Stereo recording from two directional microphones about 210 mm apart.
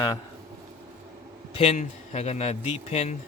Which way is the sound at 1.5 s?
35° left (ahead or behind).